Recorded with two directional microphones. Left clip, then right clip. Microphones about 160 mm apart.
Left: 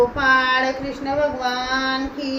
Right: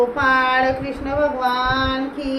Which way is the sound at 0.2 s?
15° right (ahead or behind).